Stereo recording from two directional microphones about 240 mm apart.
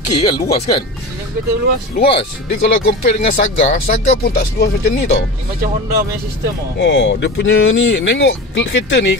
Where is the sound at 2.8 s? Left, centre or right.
Left.